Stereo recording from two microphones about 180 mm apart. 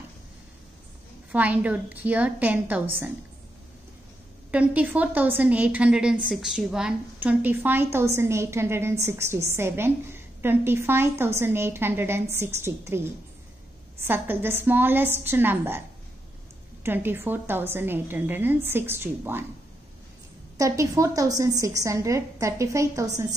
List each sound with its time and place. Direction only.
1.3 s a woman's voice: 10° right (ahead or behind)
4.5 s a woman's voice: 10° right (ahead or behind)
16.8 s a woman's voice: 10° right (ahead or behind)
20.5 s a woman's voice: 20° right (ahead or behind)